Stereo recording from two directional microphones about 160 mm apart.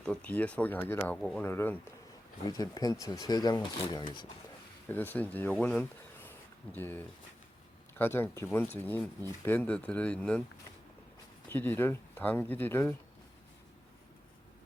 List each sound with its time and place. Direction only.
0.0 s speech: 5° left (ahead or behind)
2.5 s speech: 25° left (ahead or behind)
4.9 s speech: 10° left (ahead or behind)
11.4 s speech: 15° left (ahead or behind)